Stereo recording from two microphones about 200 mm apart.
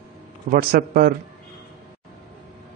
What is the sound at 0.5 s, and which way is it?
Speech, 45° right (ahead or behind).